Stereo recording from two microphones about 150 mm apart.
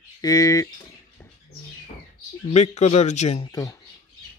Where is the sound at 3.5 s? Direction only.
25° left (ahead or behind).